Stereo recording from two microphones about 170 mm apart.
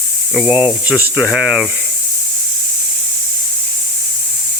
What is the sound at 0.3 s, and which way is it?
Speech, 5° right (ahead or behind).